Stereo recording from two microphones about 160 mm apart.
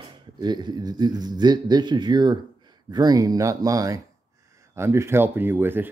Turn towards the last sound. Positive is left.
turn(degrees=-15)  # may be behind; listen again after turning